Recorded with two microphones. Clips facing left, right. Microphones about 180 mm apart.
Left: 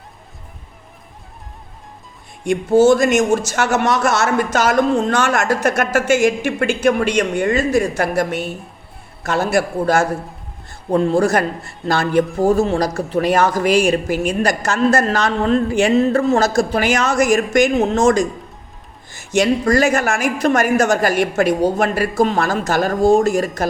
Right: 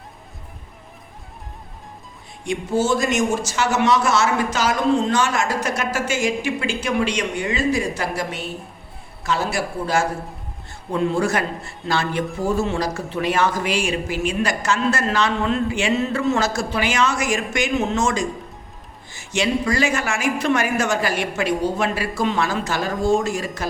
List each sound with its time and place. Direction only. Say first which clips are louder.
2.9 s speech: left 6 dB; 50° left (ahead or behind)
19.3 s speech: left 6 dB; 45° left (ahead or behind)